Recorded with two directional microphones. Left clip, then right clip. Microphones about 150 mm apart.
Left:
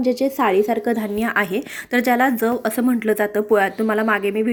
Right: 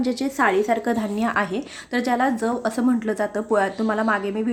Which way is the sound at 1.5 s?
30° left (ahead or behind).